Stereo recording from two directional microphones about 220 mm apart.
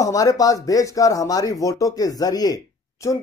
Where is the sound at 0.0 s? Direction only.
15° left (ahead or behind).